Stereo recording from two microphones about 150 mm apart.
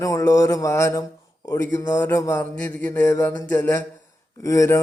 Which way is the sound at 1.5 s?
20° left (ahead or behind).